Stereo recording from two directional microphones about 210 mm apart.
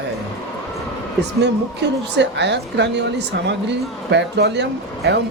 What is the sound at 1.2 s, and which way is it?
A woman's voice, 55° right (ahead or behind).